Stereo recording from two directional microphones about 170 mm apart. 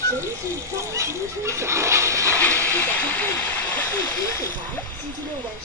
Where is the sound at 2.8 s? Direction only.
10° left (ahead or behind).